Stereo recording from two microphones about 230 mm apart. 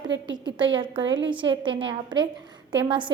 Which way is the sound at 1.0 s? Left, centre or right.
Right.